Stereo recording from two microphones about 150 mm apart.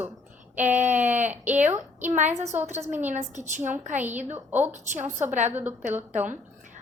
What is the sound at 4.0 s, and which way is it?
Speech, 10° right (ahead or behind).